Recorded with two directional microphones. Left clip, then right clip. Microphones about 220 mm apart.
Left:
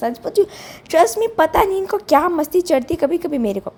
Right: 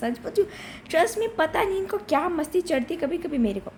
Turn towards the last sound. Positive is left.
turn(degrees=30)  # may be behind; listen again after turning